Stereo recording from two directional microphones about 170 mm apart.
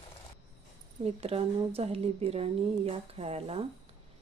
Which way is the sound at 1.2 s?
35° right (ahead or behind).